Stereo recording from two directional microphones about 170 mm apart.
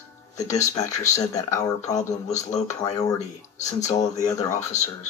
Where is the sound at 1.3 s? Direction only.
20° left (ahead or behind).